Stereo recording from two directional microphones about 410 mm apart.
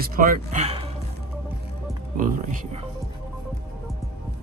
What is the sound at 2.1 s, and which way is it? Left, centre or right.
Speech, centre.